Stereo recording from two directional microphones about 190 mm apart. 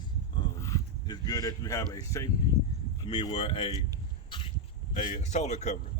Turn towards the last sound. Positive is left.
turn(degrees=35)  # may be behind; listen again after turning